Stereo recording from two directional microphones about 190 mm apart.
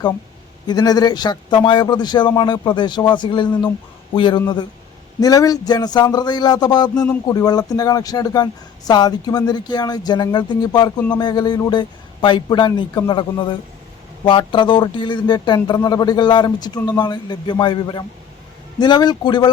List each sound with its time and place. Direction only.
0.7 s speech: 20° left (ahead or behind)